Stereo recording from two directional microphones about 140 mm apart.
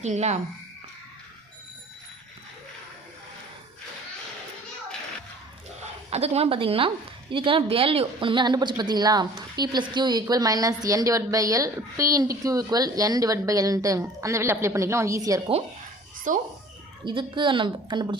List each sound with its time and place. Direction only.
0.0 s speech: 55° right (ahead or behind)
5.8 s a woman's voice: 50° right (ahead or behind); by 15.4 s 25° right (ahead or behind)
16.3 s a child's voice: 70° right (ahead or behind)
17.1 s a woman's voice: 35° right (ahead or behind)